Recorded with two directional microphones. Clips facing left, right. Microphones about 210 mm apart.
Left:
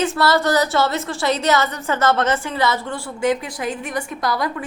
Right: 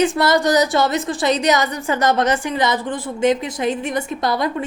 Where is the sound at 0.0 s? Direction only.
15° right (ahead or behind).